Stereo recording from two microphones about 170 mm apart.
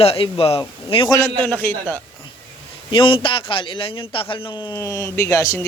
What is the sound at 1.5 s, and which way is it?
Speech, 10° left (ahead or behind).